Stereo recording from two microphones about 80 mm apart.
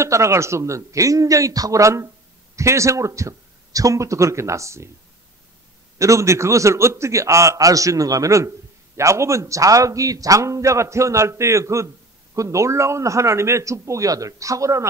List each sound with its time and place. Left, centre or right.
0.0 s a man's voice: right
5.9 s a man's voice: right